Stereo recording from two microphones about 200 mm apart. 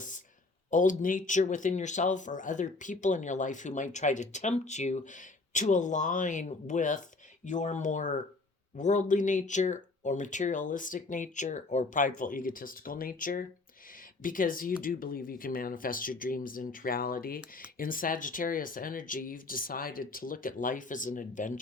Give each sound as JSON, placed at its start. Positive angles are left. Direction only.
{"t": 0.7, "sound": "speech", "side_deg": 40}